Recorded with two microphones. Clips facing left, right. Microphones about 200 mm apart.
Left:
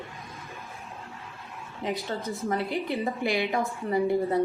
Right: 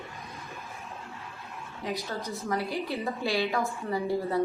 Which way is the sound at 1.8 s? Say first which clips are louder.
Left 3 dB; 25° left (ahead or behind).